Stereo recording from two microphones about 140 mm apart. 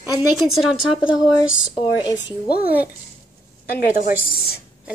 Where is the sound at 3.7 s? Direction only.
90° left.